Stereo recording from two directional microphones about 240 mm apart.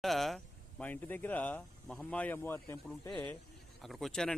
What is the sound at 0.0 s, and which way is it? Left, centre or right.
Speech, centre.